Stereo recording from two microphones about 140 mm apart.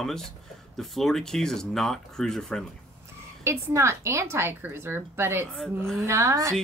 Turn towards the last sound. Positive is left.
turn(degrees=-20)  # may be behind; listen again after turning